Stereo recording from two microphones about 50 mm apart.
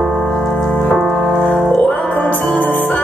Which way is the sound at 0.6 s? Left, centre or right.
Centre.